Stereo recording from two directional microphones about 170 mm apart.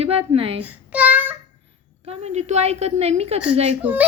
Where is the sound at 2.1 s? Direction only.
40° right (ahead or behind).